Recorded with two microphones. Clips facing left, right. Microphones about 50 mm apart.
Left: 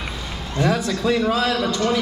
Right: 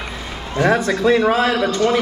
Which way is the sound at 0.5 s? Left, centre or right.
Right.